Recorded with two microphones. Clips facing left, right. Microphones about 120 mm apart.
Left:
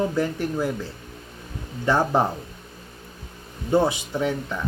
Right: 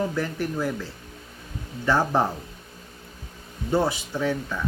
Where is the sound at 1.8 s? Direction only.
20° left (ahead or behind).